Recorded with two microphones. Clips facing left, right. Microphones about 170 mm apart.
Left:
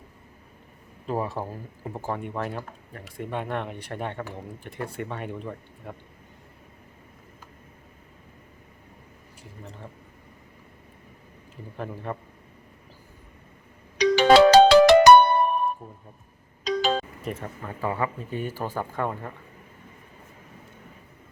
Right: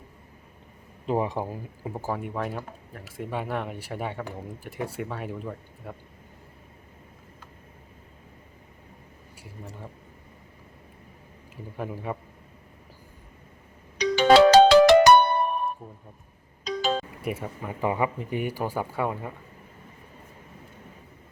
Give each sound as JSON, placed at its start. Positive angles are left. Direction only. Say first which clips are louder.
{"t": 1.0, "sound": "speech", "louder": "right 2 dB", "side_deg": -20}
{"t": 9.4, "sound": "speech", "louder": "right 1 dB", "side_deg": -10}
{"t": 11.8, "sound": "speech", "louder": "right 1 dB", "side_deg": -10}
{"t": 14.0, "sound": "ringtone", "louder": "left 1 dB", "side_deg": 80}
{"t": 16.6, "sound": "music", "louder": "left 2 dB", "side_deg": 80}
{"t": 17.2, "sound": "speech", "louder": "right 2 dB", "side_deg": -10}